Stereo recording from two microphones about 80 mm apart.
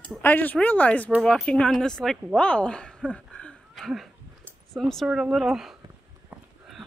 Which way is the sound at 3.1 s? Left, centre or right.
Centre.